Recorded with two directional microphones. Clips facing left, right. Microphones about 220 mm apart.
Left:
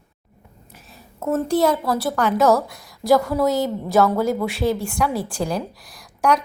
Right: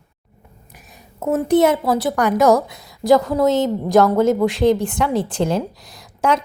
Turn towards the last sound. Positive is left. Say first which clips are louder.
# right 1 dB
turn(degrees=-25)  # may be behind; listen again after turning